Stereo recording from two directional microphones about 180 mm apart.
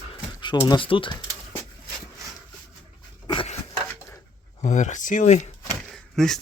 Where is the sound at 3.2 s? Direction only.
30° left (ahead or behind).